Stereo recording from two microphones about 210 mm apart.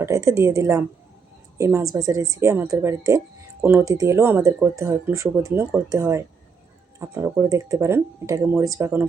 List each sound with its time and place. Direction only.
0.0 s speech: 15° right (ahead or behind)